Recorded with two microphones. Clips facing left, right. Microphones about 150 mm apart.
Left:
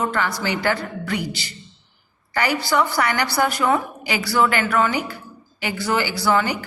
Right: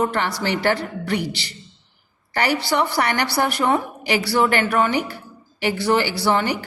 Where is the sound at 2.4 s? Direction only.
30° right (ahead or behind).